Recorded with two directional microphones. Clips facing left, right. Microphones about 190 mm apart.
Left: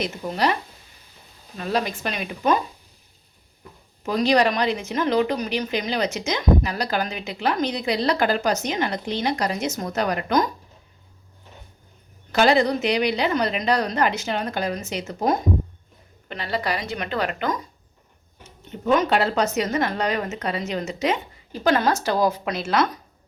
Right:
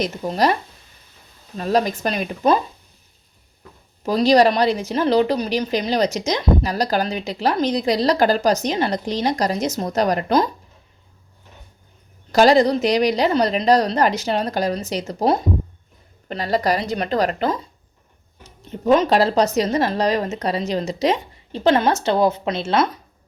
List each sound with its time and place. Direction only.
0.0 s a woman's voice: 40° right (ahead or behind)
1.5 s a woman's voice: 40° right (ahead or behind)
4.0 s a woman's voice: 35° right (ahead or behind)
12.3 s a woman's voice: 35° right (ahead or behind)
18.7 s a woman's voice: 35° right (ahead or behind)